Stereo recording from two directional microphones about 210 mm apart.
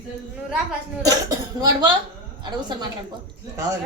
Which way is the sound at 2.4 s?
20° right (ahead or behind).